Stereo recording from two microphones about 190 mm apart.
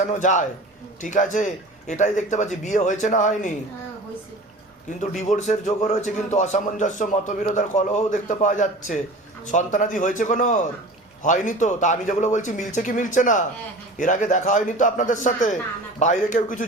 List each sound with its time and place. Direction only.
0.0 s a man's voice: 40° left (ahead or behind)
4.9 s a man's voice: 40° left (ahead or behind)